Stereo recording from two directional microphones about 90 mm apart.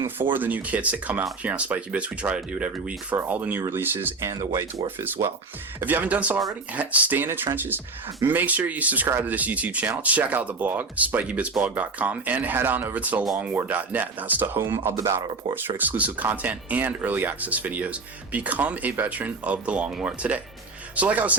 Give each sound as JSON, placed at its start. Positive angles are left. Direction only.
{"t": 0.3, "sound": "speech", "side_deg": -20}
{"t": 15.5, "sound": "speech", "side_deg": -20}